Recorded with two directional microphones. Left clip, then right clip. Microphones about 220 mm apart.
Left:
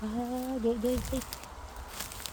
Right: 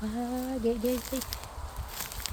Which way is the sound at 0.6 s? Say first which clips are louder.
Right 1 dB; 5° right (ahead or behind).